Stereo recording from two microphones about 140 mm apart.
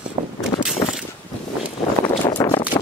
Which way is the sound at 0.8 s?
20° left (ahead or behind).